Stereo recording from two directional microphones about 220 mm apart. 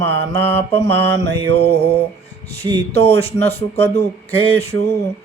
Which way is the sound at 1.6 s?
45° right (ahead or behind).